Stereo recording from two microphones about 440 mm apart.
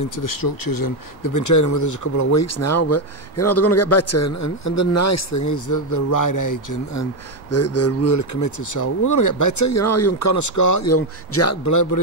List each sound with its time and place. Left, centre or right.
0.0 s speech: left